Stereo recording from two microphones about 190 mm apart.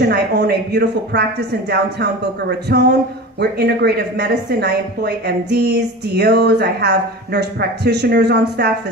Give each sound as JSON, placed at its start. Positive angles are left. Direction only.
{"t": 0.1, "sound": "speech", "side_deg": -60}